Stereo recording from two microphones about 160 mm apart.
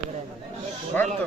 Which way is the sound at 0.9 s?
10° left (ahead or behind).